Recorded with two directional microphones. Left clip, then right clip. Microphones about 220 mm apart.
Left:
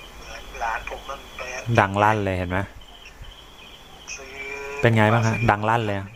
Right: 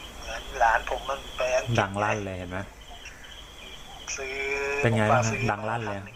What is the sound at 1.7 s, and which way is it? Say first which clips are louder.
Speech: left 7 dB; 25° left (ahead or behind).